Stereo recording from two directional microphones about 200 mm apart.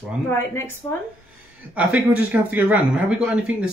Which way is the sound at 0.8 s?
20° left (ahead or behind).